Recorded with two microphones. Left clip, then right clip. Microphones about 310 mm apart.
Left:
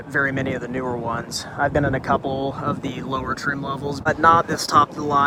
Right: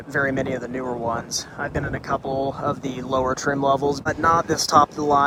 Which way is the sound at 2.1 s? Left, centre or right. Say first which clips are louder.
Left 1 dB; centre.